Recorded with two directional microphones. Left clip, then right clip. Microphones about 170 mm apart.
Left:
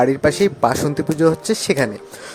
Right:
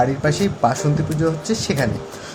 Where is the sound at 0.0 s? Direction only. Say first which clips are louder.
Left 4 dB; 60° left (ahead or behind).